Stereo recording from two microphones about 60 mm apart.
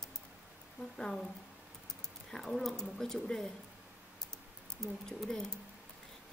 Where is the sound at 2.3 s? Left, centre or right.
Centre.